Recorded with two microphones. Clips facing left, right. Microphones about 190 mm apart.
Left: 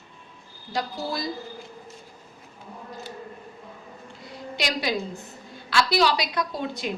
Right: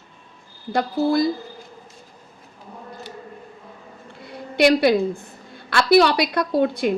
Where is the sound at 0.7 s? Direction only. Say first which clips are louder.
Right 10 dB; 60° right (ahead or behind).